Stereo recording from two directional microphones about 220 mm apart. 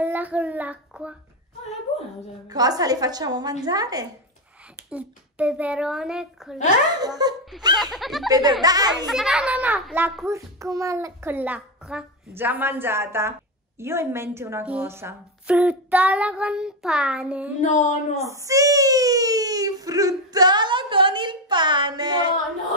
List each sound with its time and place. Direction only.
0.0 s child singing: 10° right (ahead or behind)
2.4 s a child's voice: 15° right (ahead or behind)
4.8 s a woman's voice: 5° right (ahead or behind)
7.0 s a child's voice: 20° right (ahead or behind)
7.8 s speech: centre (ahead or behind)
8.3 s a child's voice: 15° right (ahead or behind)
9.0 s a child's voice: centre (ahead or behind)
17.6 s speech: 35° left (ahead or behind)
18.1 s a child's voice: 15° right (ahead or behind)